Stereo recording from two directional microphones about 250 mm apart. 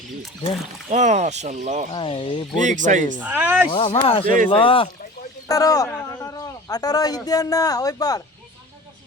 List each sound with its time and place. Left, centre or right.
0.9 s speech: right
1.9 s speech: left
2.6 s speech: right
3.2 s speech: centre
3.7 s a man's voice: left